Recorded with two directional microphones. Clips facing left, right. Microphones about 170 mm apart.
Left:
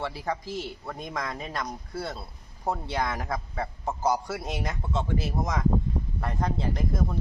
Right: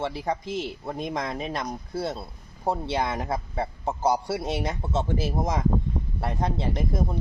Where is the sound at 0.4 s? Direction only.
75° right (ahead or behind).